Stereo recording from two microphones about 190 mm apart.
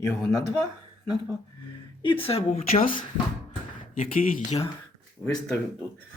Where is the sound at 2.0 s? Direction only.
25° left (ahead or behind).